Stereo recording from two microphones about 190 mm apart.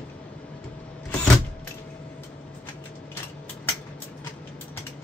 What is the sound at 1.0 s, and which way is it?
Power windows, 5° left (ahead or behind).